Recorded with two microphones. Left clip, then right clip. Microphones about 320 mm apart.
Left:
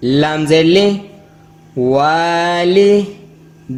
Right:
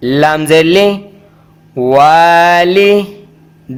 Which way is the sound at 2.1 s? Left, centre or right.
Right.